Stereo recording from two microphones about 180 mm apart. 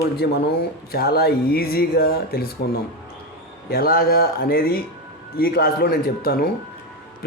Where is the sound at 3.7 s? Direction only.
55° left (ahead or behind).